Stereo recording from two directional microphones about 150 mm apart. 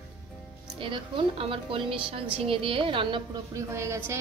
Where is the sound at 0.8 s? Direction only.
35° right (ahead or behind).